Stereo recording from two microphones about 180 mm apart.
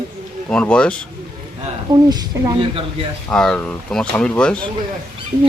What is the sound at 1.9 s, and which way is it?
Speech, 20° right (ahead or behind).